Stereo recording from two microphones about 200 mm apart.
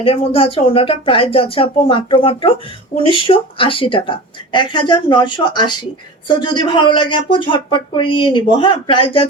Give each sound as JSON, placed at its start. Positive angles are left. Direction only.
{"t": 0.0, "sound": "speech", "side_deg": 30}